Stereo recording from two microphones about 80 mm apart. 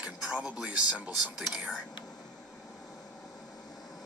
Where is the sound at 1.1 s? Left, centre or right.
Left.